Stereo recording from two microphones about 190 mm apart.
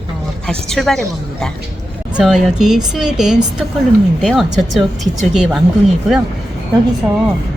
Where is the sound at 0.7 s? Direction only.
Centre (ahead or behind).